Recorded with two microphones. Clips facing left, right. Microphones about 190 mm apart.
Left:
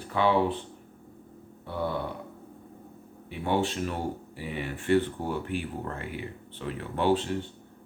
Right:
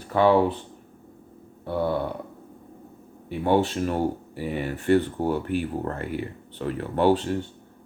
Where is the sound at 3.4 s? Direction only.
45° right (ahead or behind).